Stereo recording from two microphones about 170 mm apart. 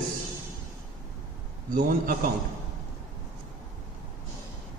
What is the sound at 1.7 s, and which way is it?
Speech, 55° right (ahead or behind).